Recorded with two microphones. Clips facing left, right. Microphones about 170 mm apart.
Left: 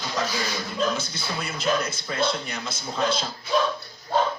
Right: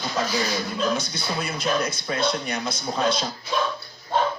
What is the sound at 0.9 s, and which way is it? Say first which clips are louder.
Speech: right 3 dB; 55° right (ahead or behind).